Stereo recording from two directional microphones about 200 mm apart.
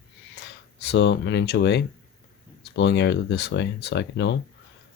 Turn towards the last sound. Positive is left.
turn(degrees=60)  # may be behind; listen again after turning